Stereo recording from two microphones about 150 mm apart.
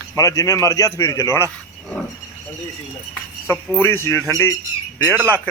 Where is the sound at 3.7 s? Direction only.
15° left (ahead or behind).